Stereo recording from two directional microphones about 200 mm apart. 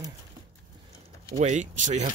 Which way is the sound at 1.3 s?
35° right (ahead or behind).